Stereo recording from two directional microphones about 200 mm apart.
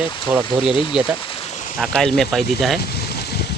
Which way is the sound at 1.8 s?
Centre (ahead or behind).